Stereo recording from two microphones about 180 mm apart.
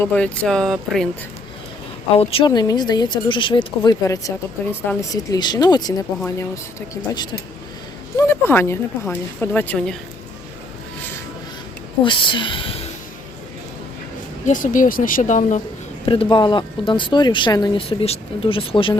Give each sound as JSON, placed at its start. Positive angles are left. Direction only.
{"t": 0.0, "sound": "speech", "side_deg": 5}
{"t": 2.1, "sound": "a woman's voice", "side_deg": 30}
{"t": 8.3, "sound": "a woman's voice", "side_deg": 10}
{"t": 12.0, "sound": "speech", "side_deg": 25}
{"t": 14.4, "sound": "speech", "side_deg": 45}
{"t": 16.0, "sound": "speech", "side_deg": 25}